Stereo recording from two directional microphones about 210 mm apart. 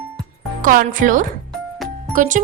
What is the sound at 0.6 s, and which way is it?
Speech, 40° right (ahead or behind).